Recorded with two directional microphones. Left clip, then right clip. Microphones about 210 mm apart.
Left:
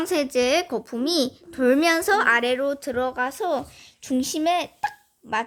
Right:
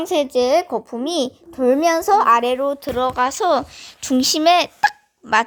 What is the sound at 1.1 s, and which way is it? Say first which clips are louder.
Speech: right 1 dB; 35° left (ahead or behind).